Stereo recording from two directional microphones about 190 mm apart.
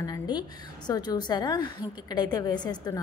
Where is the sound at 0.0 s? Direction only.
20° left (ahead or behind).